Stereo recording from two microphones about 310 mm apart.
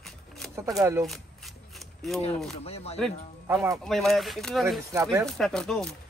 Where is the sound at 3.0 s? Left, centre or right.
Centre.